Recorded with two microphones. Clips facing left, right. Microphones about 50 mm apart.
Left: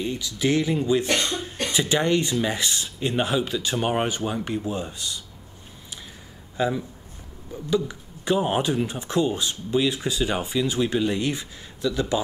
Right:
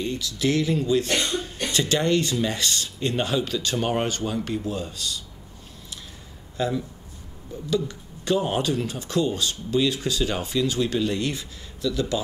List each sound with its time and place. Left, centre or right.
0.0 s speech: centre
6.5 s speech: centre